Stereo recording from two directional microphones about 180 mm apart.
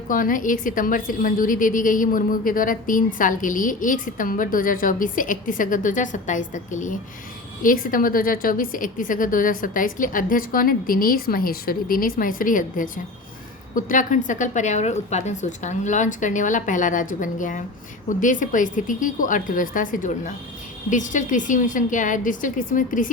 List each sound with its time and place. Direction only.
0.1 s a woman's voice: 50° left (ahead or behind)